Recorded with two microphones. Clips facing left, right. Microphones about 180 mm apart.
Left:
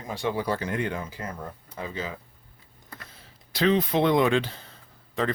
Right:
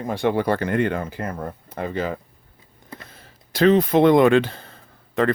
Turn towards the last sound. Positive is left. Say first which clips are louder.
# right 7 dB
turn(degrees=-55)  # may be behind; listen again after turning